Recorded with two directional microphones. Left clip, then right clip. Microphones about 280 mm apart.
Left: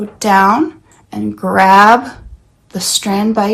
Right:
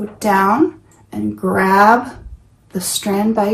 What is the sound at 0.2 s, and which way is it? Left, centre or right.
Speech, centre.